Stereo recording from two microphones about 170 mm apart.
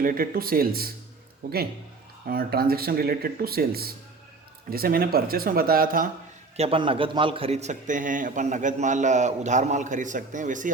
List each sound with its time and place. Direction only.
0.0 s speech: 55° right (ahead or behind)
2.2 s speech: 60° right (ahead or behind)
6.6 s a man's voice: 30° right (ahead or behind); by 10.7 s 50° right (ahead or behind)